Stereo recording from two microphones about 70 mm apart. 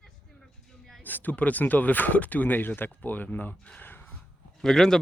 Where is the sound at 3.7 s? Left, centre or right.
Left.